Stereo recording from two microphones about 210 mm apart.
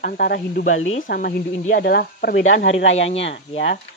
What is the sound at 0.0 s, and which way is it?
Speech, 45° left (ahead or behind).